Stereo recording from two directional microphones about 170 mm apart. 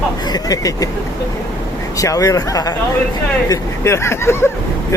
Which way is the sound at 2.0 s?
20° left (ahead or behind).